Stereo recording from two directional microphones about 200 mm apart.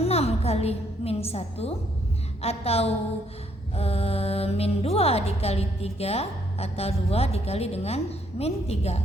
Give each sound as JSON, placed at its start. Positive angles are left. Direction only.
{"t": 0.0, "sound": "a woman's voice", "side_deg": 30}